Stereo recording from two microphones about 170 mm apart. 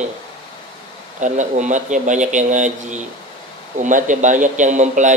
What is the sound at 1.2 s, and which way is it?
A man's voice, 45° right (ahead or behind).